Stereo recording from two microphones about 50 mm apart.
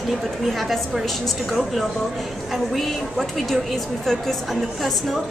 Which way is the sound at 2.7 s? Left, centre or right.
Centre.